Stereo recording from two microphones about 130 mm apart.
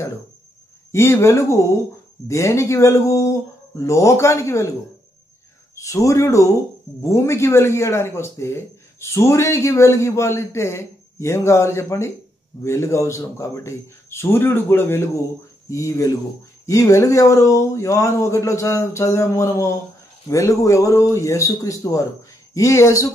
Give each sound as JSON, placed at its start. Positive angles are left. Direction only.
{"t": 0.9, "sound": "a man's voice", "side_deg": 20}
{"t": 5.8, "sound": "a man's voice", "side_deg": 25}